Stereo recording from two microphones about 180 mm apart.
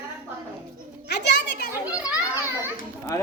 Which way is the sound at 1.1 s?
70° left (ahead or behind).